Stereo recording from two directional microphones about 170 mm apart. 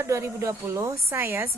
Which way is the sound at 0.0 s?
15° right (ahead or behind).